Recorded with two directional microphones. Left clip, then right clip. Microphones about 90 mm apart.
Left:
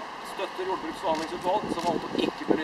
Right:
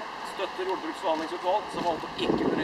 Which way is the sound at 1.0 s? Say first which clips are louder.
Even; 5° left (ahead or behind).